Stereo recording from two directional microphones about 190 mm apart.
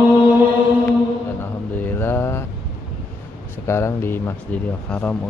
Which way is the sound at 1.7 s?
10° left (ahead or behind).